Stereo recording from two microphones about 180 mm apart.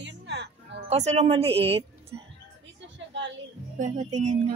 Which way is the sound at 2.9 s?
85° right.